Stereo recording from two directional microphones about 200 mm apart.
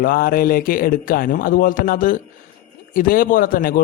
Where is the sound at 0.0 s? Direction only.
45° left (ahead or behind).